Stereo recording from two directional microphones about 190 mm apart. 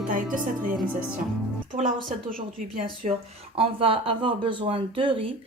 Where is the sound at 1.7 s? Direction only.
45° right (ahead or behind).